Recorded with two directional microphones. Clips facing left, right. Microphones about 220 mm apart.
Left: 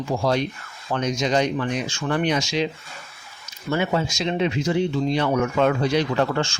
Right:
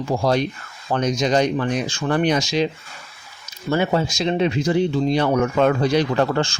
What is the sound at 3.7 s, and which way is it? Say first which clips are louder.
Speech: right 3 dB; 35° right (ahead or behind).